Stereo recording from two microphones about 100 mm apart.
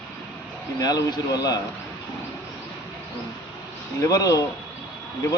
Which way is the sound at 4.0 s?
35° left (ahead or behind).